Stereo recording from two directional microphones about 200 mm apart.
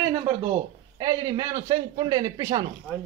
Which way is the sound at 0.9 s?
20° right (ahead or behind).